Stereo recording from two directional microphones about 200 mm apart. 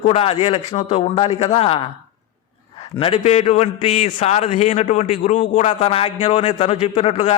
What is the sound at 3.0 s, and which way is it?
Speech, 30° left (ahead or behind).